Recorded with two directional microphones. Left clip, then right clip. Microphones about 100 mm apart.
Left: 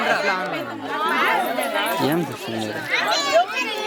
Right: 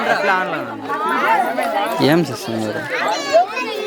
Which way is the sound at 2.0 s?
40° right (ahead or behind).